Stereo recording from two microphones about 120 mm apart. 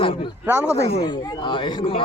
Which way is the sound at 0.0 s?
45° left (ahead or behind).